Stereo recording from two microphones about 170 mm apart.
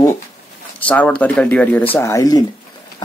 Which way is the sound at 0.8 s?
10° left (ahead or behind).